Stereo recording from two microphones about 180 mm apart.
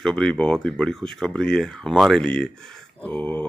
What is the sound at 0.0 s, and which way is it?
Speech, 5° left (ahead or behind).